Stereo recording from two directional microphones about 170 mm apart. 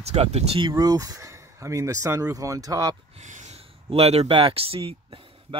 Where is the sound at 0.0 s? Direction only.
40° right (ahead or behind); by 3.0 s 20° right (ahead or behind).